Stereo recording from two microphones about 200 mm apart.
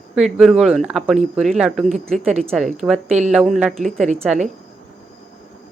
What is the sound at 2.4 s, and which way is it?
Speech, 5° left (ahead or behind).